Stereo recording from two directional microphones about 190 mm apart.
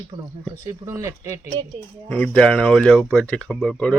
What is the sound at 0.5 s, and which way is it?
Speech, 20° right (ahead or behind).